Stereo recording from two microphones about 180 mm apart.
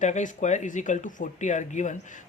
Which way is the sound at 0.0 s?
45° left (ahead or behind).